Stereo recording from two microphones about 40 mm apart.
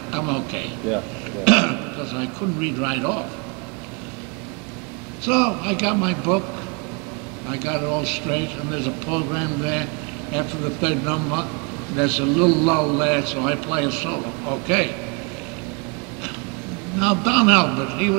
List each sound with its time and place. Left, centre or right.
0.1 s speech: centre
5.2 s speech: centre
7.4 s speech: centre
17.0 s speech: centre